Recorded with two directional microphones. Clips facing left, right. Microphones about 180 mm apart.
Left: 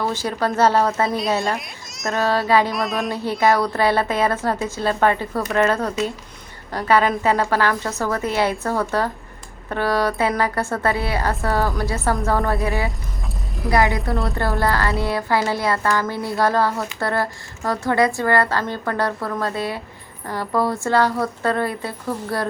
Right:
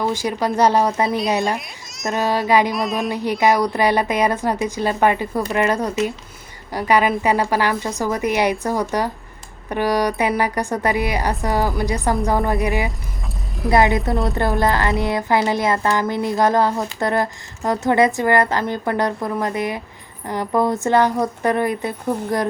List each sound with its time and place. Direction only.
0.0 s a woman's voice: 15° right (ahead or behind)
1.5 s a child's voice: centre (ahead or behind)
2.1 s a woman's voice: 15° right (ahead or behind)
2.7 s speech: centre (ahead or behind)
3.1 s a woman's voice: 15° right (ahead or behind)